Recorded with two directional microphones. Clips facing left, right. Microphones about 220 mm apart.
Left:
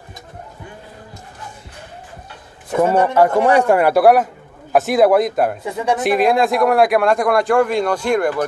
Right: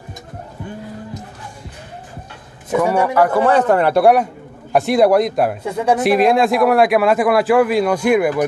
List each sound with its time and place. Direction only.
2.8 s speech: 25° left (ahead or behind)
3.4 s speech: 10° left (ahead or behind); by 8.5 s 10° right (ahead or behind)